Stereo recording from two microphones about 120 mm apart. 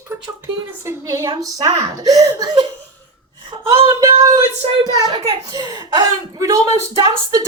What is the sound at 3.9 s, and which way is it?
A woman's voice, 30° right (ahead or behind).